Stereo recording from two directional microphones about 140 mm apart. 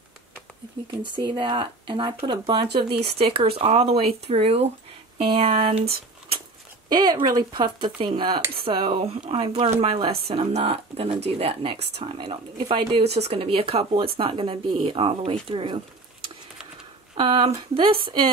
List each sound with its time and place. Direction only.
1.1 s speech: 35° right (ahead or behind)
6.9 s speech: 30° right (ahead or behind)
17.2 s speech: 35° right (ahead or behind)